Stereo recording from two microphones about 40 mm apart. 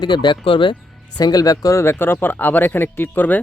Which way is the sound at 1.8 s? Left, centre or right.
Left.